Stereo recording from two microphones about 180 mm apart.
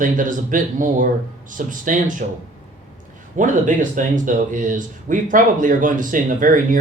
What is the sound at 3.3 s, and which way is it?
Speech, 45° right (ahead or behind).